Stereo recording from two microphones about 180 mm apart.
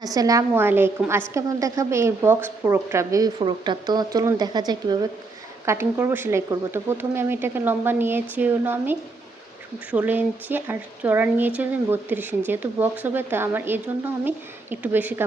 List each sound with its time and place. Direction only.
0.0 s a woman's voice: 20° right (ahead or behind)